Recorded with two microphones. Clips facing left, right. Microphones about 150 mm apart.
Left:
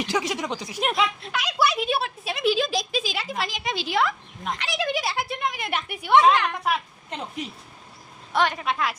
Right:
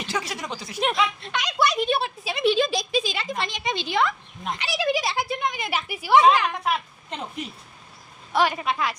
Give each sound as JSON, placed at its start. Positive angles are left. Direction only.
{"t": 0.0, "sound": "speech", "side_deg": 15}
{"t": 0.8, "sound": "a woman's voice", "side_deg": 0}
{"t": 8.3, "sound": "a woman's voice", "side_deg": -5}